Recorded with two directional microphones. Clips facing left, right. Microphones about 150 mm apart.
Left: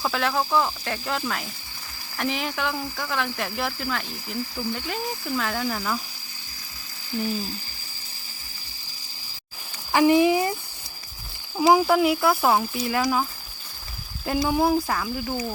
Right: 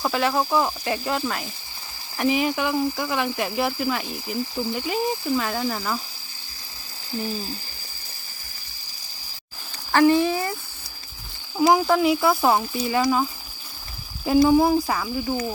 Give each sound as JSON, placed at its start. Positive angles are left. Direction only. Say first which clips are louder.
{"t": 0.0, "sound": "speech", "louder": "right 2 dB", "side_deg": -5}
{"t": 5.4, "sound": "speech", "louder": "right 1 dB", "side_deg": -5}
{"t": 7.1, "sound": "speech", "louder": "left 1 dB", "side_deg": -30}
{"t": 9.9, "sound": "speech", "louder": "even", "side_deg": 15}
{"t": 11.7, "sound": "speech", "louder": "left 1 dB", "side_deg": 5}
{"t": 14.4, "sound": "speech", "louder": "right 2 dB", "side_deg": 0}